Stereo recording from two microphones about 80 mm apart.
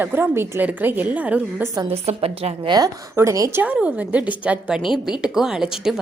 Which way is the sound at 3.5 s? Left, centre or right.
Right.